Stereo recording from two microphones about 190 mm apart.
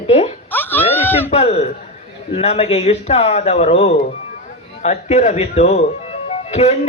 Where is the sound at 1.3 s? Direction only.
35° left (ahead or behind).